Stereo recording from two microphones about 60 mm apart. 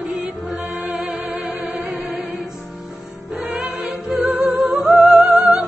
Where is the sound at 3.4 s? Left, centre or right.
Centre.